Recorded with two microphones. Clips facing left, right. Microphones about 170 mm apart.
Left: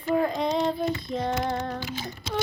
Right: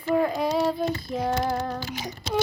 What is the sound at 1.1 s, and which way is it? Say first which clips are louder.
Female singing: right 4 dB; 5° right (ahead or behind).